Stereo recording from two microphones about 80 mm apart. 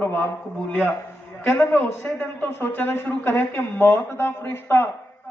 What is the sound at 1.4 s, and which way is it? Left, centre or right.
Speech, left.